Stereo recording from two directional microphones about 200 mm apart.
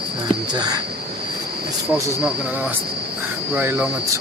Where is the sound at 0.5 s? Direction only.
20° right (ahead or behind).